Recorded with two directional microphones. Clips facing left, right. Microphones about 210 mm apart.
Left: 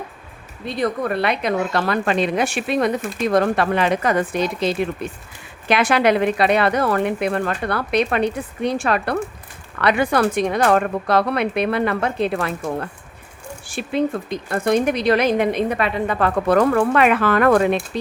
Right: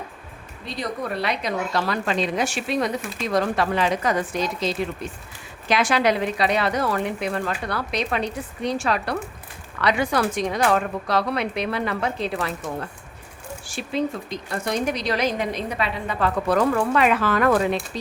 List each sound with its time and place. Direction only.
0.6 s speech: 55° left (ahead or behind)